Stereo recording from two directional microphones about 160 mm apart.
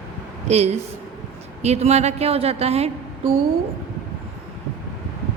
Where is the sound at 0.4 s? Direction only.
40° right (ahead or behind).